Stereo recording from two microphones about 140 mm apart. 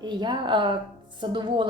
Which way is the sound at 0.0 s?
35° right (ahead or behind).